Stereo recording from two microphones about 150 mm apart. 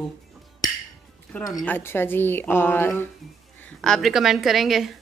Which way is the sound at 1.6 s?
15° left (ahead or behind).